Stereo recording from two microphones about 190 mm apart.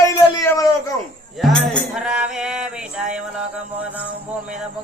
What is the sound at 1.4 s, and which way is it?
Music, centre (ahead or behind).